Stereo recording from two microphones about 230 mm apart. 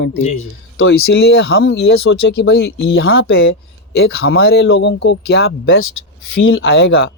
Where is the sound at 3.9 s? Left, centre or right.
Left.